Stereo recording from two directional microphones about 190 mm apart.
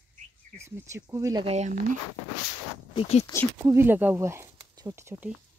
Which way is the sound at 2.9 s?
30° left (ahead or behind).